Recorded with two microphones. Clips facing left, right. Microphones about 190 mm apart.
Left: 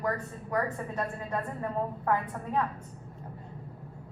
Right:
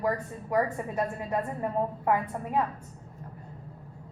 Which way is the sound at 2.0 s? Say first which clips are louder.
Right 2 dB; 15° right (ahead or behind).